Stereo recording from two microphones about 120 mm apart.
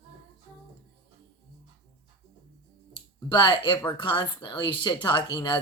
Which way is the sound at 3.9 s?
40° left (ahead or behind).